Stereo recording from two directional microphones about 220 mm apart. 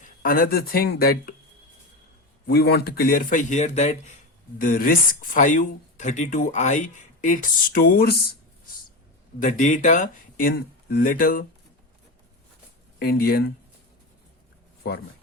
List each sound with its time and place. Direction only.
0.0 s speech: 40° left (ahead or behind)
2.5 s speech: 45° left (ahead or behind)
9.4 s speech: 35° left (ahead or behind)
13.0 s speech: 45° left (ahead or behind)